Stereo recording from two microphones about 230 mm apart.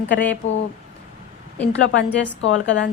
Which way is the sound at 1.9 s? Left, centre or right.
Left.